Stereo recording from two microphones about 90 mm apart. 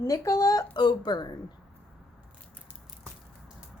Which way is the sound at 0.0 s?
35° left (ahead or behind).